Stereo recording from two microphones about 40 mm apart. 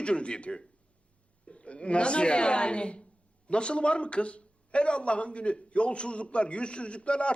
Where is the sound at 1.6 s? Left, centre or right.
Left.